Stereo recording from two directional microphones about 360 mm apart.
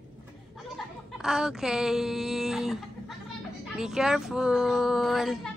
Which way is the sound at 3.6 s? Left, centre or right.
Centre.